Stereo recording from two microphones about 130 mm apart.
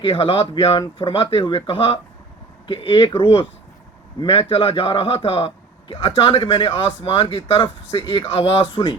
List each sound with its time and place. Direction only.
0.0 s speech: 45° left (ahead or behind)
4.2 s speech: 45° left (ahead or behind)